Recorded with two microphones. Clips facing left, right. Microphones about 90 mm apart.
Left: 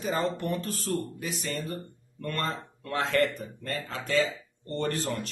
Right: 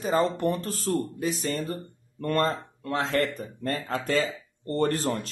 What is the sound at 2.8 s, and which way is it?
Speech, 25° right (ahead or behind).